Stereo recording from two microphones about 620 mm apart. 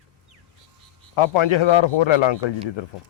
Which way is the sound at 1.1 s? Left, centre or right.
Left.